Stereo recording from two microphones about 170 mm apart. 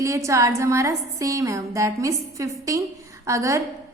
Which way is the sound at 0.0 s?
15° right (ahead or behind).